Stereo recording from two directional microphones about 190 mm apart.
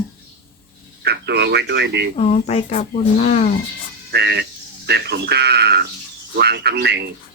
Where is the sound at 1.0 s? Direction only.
60° right (ahead or behind).